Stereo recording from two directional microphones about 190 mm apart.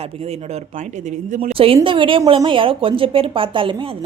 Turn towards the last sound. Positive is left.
turn(degrees=-25)  # may be behind; listen again after turning